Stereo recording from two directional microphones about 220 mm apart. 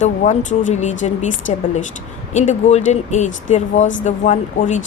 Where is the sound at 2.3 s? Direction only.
30° left (ahead or behind).